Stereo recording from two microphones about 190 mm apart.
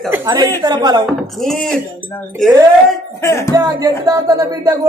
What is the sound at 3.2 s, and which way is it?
Speech, 15° left (ahead or behind).